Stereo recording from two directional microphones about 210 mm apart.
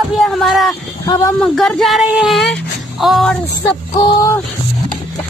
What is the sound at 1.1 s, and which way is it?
Speech, 15° left (ahead or behind).